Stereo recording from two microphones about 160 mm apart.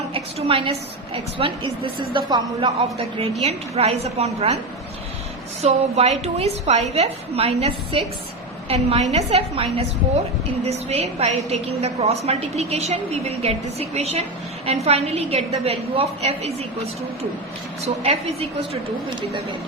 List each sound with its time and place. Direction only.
0.1 s a woman's voice: 35° right (ahead or behind)
5.6 s a woman's voice: 40° right (ahead or behind)
17.8 s a woman's voice: 40° right (ahead or behind)